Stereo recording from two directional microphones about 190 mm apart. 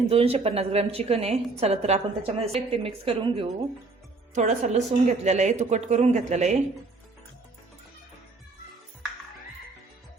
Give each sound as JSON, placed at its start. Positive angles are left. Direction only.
{"t": 0.1, "sound": "a woman's voice", "side_deg": -30}